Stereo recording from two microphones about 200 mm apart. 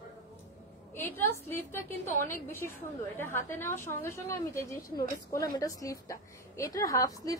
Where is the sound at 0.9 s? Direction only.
10° left (ahead or behind).